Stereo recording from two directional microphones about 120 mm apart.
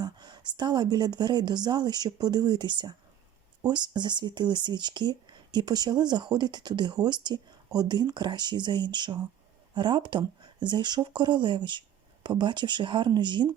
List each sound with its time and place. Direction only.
0.0 s speech: 40° right (ahead or behind)